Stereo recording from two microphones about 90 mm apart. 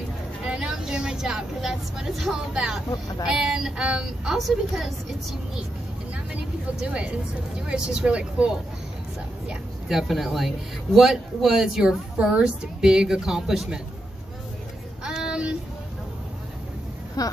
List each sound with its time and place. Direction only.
0.5 s speech: 10° right (ahead or behind)
6.8 s speech: 15° right (ahead or behind)
9.5 s speech: 5° right (ahead or behind)
15.0 s a sound: 10° right (ahead or behind)
17.2 s speech: 45° left (ahead or behind)